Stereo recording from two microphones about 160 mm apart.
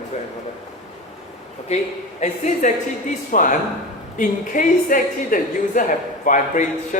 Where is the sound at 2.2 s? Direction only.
50° left (ahead or behind).